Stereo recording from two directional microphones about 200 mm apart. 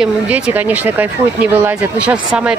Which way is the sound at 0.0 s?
10° right (ahead or behind).